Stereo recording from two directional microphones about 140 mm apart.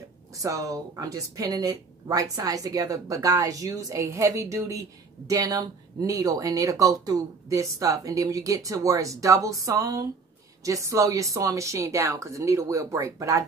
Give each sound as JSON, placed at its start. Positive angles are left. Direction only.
{"t": 0.3, "sound": "speech", "side_deg": -25}